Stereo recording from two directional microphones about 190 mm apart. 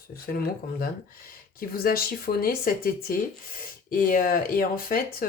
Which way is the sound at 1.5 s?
50° left (ahead or behind).